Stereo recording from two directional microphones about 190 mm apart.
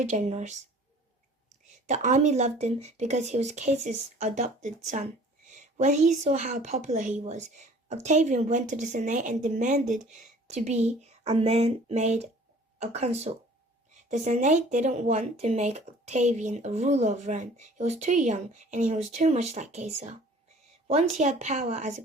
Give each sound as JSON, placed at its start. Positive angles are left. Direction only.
{"t": 0.0, "sound": "speech", "side_deg": -35}
{"t": 1.6, "sound": "a woman's voice", "side_deg": -40}